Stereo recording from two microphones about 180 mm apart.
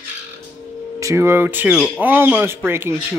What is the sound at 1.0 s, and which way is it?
Speech, 15° right (ahead or behind).